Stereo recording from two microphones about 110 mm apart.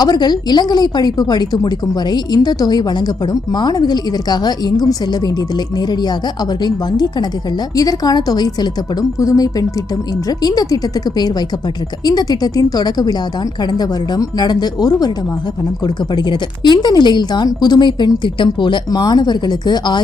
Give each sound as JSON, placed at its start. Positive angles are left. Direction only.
{"t": 0.0, "sound": "speech", "side_deg": 40}